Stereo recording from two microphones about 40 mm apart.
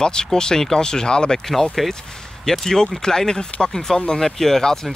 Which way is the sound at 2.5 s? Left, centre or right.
Centre.